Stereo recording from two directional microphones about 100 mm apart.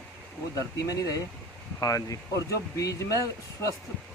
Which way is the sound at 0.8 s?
35° left (ahead or behind).